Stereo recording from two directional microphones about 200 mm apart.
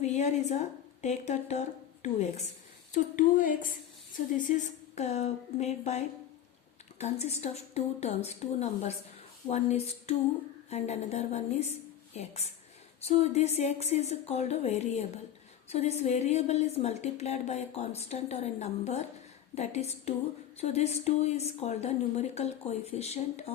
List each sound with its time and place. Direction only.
0.0 s a woman's voice: 35° left (ahead or behind)
7.0 s a woman's voice: 35° left (ahead or behind)